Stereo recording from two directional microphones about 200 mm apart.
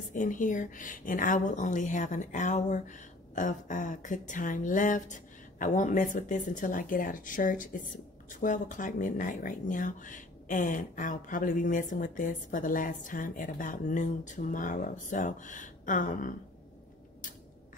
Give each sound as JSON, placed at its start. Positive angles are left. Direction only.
{"t": 0.1, "sound": "speech", "side_deg": 40}